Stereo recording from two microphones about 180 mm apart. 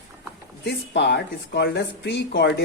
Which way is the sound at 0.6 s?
70° left (ahead or behind).